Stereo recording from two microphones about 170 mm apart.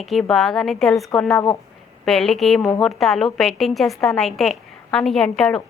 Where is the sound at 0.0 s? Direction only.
Centre (ahead or behind).